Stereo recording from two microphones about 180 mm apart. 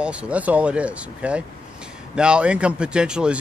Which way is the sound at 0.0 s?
5° right (ahead or behind).